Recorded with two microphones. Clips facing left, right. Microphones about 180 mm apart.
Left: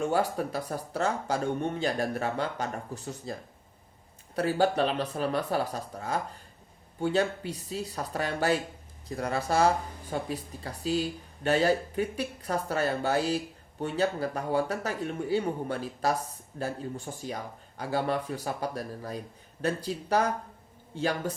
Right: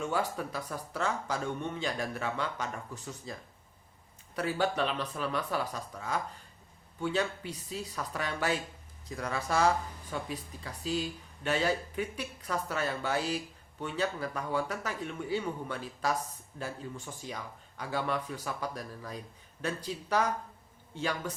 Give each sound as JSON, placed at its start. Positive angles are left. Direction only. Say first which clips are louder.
{"t": 0.0, "sound": "speech", "louder": "left 5 dB", "side_deg": 40}